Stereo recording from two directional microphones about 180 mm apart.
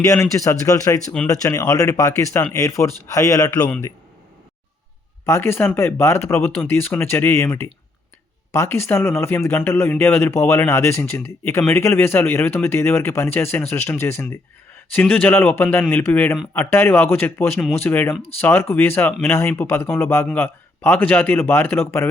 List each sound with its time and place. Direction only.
0.0 s speech: 15° left (ahead or behind)
5.2 s speech: 15° left (ahead or behind)